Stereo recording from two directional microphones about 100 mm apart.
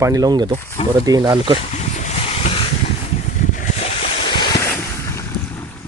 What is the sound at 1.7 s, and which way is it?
Boat, 90° left.